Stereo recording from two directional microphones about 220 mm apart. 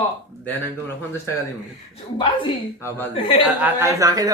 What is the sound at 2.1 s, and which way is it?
Speech, 20° left (ahead or behind).